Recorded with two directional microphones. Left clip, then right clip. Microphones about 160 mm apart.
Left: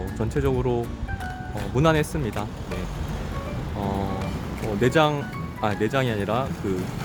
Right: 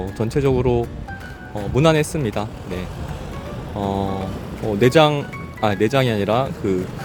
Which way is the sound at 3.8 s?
25° right (ahead or behind).